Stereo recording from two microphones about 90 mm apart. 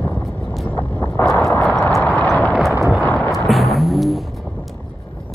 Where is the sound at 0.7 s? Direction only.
20° left (ahead or behind).